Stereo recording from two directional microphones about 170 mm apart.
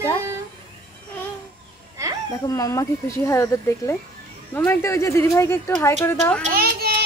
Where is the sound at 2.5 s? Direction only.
20° left (ahead or behind).